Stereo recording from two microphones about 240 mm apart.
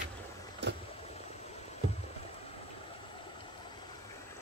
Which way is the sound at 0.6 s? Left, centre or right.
Right.